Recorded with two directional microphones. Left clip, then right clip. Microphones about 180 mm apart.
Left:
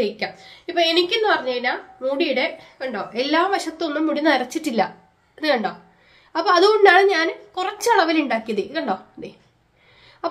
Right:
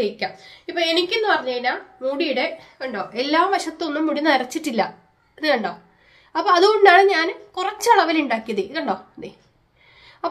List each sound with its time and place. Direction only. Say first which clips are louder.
0.0 s a woman's voice: even; centre (ahead or behind)